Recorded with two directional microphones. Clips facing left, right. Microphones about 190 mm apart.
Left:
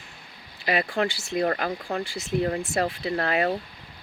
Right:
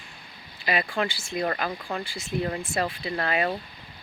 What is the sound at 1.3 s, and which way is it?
Speech, 40° left (ahead or behind).